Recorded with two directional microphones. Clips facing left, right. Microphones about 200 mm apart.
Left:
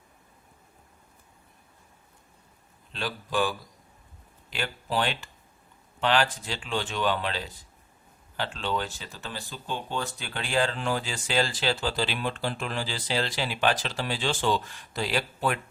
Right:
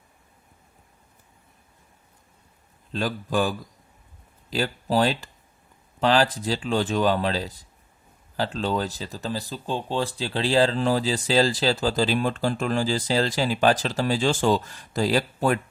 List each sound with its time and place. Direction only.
2.9 s a man's voice: 40° right (ahead or behind)